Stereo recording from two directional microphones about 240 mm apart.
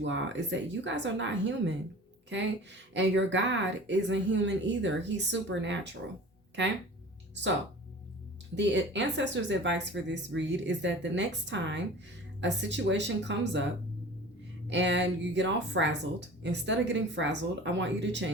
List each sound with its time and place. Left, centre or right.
0.0 s speech: right
2.9 s speech: right
8.5 s speech: right
14.7 s speech: right